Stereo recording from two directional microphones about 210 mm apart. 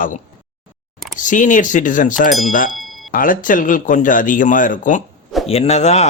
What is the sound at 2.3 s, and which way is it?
Speech, centre (ahead or behind).